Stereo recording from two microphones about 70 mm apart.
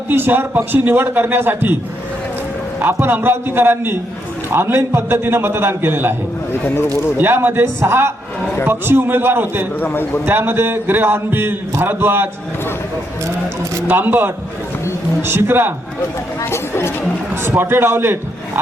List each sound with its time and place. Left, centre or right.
0.1 s a man's voice: right
2.8 s speech: right
6.5 s speech: left
7.2 s a man's voice: right
9.8 s speech: left
10.2 s speech: right
13.8 s a man's voice: right
16.4 s speech: left
17.4 s speech: right